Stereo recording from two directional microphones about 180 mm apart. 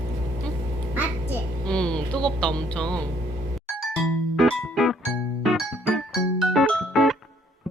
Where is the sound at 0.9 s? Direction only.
10° right (ahead or behind).